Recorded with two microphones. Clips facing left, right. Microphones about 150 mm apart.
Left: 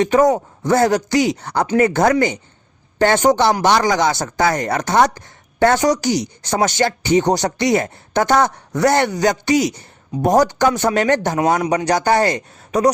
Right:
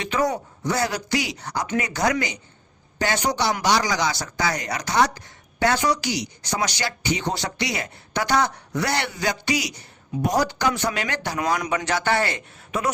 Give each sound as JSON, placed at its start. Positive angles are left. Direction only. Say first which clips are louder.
{"t": 0.0, "sound": "speech", "louder": "left 10 dB", "side_deg": 45}
{"t": 11.6, "sound": "a man's voice", "louder": "left 7 dB", "side_deg": 35}